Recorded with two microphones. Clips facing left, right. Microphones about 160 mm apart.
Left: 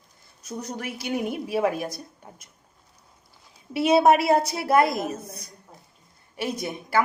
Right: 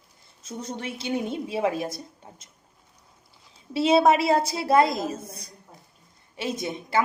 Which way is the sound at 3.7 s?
25° right (ahead or behind).